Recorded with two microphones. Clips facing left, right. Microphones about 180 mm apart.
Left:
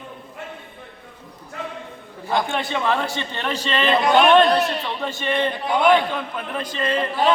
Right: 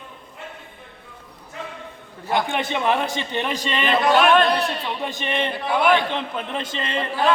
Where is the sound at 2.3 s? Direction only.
20° right (ahead or behind).